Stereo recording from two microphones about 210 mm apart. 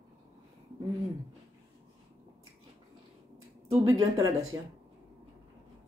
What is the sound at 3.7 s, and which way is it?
Speech, 25° right (ahead or behind).